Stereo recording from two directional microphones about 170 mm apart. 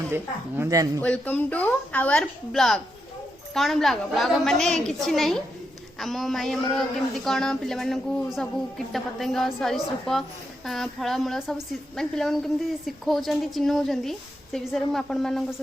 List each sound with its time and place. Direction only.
0.1 s speech: 15° right (ahead or behind)
1.0 s a woman's voice: 10° left (ahead or behind)